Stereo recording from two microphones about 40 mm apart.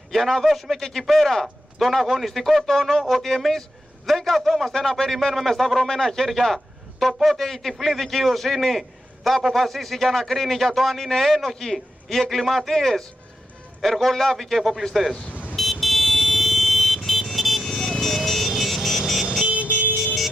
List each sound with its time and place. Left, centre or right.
0.1 s a man's voice: centre
15.2 s vehicle: left
15.5 s vehicle: centre
19.4 s vehicle: right